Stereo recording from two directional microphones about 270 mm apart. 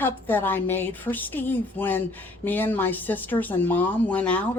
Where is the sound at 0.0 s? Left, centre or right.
Centre.